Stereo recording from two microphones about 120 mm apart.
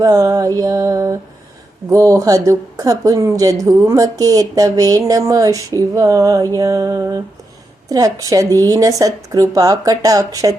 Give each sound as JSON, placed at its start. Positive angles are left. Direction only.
{"t": 0.0, "sound": "a woman's voice", "side_deg": -30}